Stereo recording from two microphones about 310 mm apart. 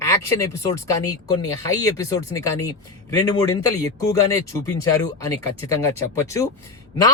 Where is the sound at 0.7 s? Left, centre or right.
Centre.